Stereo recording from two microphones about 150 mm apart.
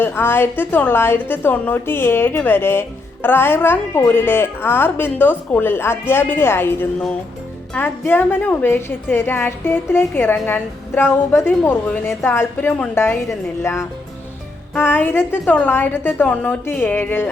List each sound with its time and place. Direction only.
0.0 s a woman's voice: 15° left (ahead or behind)